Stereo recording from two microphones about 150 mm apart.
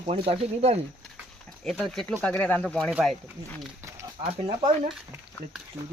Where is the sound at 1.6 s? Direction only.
Centre (ahead or behind).